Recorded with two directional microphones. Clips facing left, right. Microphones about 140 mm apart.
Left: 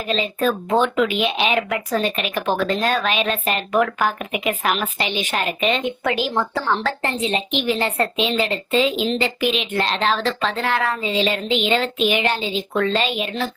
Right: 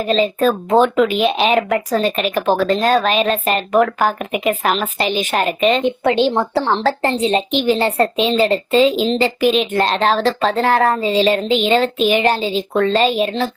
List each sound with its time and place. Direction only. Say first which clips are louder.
0.0 s a woman's voice: right 6 dB; 40° right (ahead or behind)